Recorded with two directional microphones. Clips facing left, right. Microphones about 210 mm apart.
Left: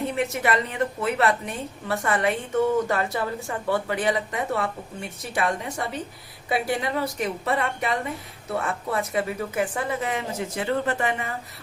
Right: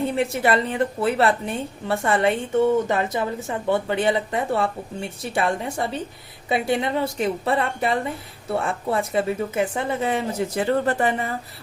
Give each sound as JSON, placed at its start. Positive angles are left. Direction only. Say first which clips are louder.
{"t": 0.2, "sound": "a woman's voice", "louder": "right 3 dB", "side_deg": -30}